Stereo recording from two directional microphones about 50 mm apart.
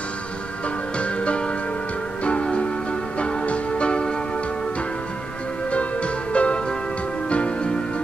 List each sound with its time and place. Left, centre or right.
0.9 s music: left
6.3 s music: left